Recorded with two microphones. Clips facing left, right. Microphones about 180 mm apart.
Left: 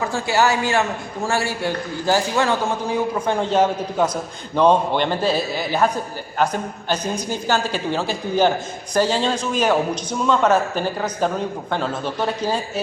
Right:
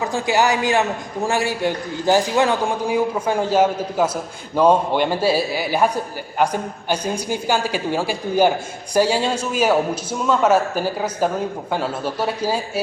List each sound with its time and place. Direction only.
0.0 s a man's voice: 15° right (ahead or behind)